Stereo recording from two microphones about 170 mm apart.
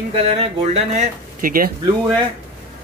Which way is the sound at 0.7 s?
40° right (ahead or behind).